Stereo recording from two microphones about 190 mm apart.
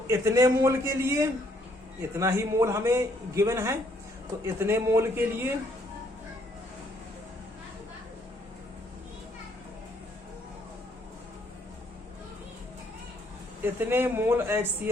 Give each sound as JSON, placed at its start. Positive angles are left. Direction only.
{"t": 0.1, "sound": "a man's voice", "side_deg": -15}
{"t": 13.7, "sound": "a man's voice", "side_deg": -10}